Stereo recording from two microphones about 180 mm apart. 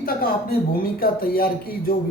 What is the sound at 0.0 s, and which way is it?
Speech, 55° left (ahead or behind).